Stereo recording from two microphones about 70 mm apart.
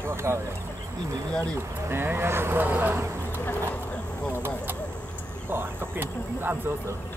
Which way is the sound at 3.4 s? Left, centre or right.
Centre.